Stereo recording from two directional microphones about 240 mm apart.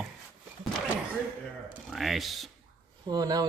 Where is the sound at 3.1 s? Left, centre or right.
Centre.